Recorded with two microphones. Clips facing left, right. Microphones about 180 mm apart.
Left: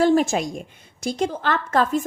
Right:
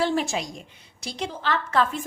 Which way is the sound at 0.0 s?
45° left (ahead or behind).